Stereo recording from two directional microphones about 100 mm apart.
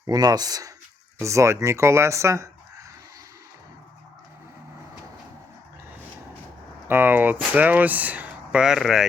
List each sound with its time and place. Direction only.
0.1 s speech: 40° right (ahead or behind)
6.8 s speech: 20° right (ahead or behind); by 9.0 s 5° right (ahead or behind)